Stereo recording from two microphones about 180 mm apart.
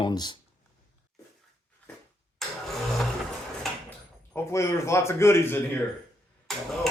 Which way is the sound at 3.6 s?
10° left (ahead or behind).